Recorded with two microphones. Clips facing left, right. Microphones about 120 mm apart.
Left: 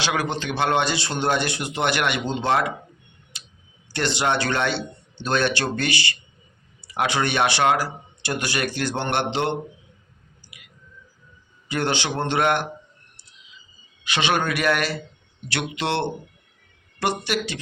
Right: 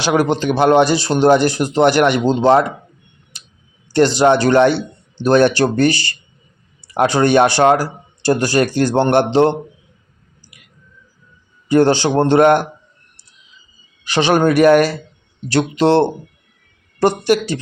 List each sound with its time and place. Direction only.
0.0 s speech: 40° right (ahead or behind)
3.9 s speech: 40° right (ahead or behind)
11.7 s speech: 40° right (ahead or behind)
14.0 s speech: 40° right (ahead or behind)